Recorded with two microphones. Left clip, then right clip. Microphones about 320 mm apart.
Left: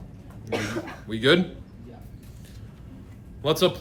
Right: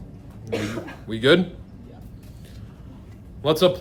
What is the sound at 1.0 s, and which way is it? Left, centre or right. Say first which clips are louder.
Speech: right 3 dB; centre.